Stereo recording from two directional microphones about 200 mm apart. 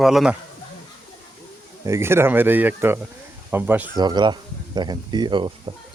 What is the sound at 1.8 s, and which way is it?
Speech, 15° right (ahead or behind).